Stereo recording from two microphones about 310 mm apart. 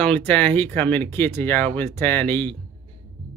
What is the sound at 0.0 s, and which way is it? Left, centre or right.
Speech, centre.